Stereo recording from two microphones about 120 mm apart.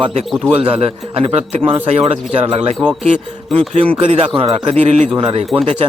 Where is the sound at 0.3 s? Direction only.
Centre (ahead or behind).